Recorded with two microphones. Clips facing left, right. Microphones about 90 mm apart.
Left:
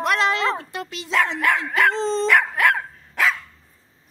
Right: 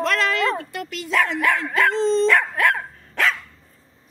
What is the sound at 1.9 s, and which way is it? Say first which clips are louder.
Speech: right 4 dB; 35° left (ahead or behind).